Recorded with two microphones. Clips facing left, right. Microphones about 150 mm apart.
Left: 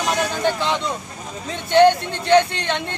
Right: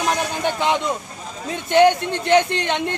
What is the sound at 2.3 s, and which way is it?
Speech, 15° right (ahead or behind).